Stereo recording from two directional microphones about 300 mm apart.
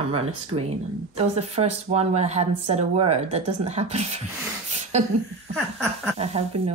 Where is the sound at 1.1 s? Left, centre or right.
Right.